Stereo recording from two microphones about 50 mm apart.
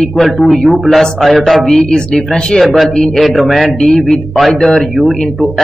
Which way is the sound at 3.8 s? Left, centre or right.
Centre.